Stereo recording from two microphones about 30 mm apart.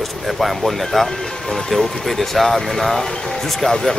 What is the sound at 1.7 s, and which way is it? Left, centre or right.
Speech, centre.